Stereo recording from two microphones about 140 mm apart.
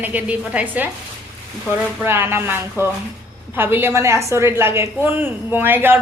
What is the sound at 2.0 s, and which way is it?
A woman's voice, 15° right (ahead or behind).